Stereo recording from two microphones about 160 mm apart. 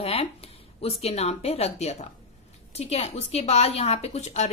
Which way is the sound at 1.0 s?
40° left (ahead or behind).